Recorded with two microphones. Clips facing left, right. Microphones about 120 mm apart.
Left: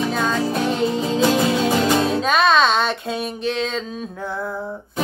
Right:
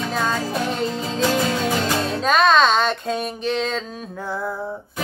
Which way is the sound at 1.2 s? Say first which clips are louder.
Left 2 dB; 15° left (ahead or behind).